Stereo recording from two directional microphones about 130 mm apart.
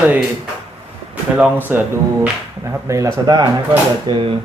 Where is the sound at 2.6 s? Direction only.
25° right (ahead or behind).